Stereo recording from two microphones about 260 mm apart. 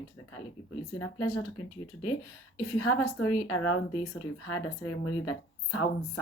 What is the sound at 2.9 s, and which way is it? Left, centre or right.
Speech, left.